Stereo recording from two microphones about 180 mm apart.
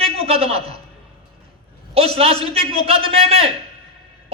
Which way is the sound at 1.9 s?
35° right (ahead or behind).